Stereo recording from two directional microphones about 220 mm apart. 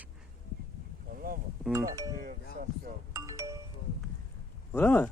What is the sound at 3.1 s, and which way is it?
Music, 15° right (ahead or behind).